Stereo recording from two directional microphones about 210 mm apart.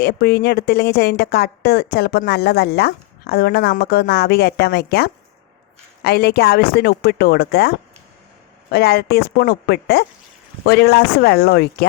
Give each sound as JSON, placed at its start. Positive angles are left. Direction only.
{"t": 0.0, "sound": "speech", "side_deg": 50}
{"t": 8.7, "sound": "speech", "side_deg": 50}